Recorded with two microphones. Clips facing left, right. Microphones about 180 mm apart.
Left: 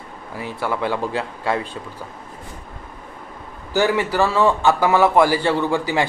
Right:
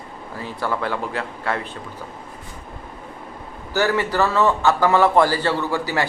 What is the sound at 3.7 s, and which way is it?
A man's voice, 15° left (ahead or behind).